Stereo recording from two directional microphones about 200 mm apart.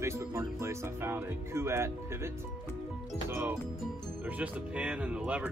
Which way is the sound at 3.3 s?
10° right (ahead or behind).